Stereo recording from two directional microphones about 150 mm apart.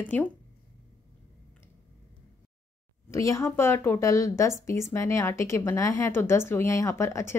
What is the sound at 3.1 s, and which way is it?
A woman's voice, 20° left (ahead or behind).